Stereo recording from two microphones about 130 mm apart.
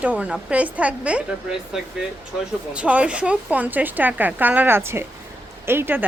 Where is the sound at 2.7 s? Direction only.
10° right (ahead or behind).